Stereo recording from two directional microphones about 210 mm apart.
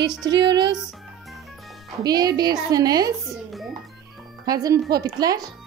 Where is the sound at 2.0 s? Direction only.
20° right (ahead or behind).